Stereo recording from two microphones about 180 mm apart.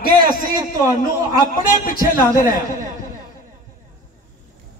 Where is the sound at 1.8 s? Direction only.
50° left (ahead or behind).